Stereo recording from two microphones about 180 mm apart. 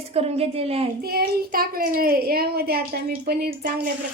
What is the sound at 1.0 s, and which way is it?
A child's voice, 55° right (ahead or behind).